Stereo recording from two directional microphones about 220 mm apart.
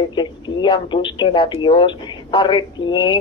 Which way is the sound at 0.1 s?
20° left (ahead or behind).